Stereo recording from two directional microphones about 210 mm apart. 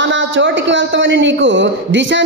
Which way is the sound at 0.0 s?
60° right (ahead or behind).